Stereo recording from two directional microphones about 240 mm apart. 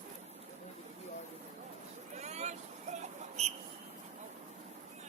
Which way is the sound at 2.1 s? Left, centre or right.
Right.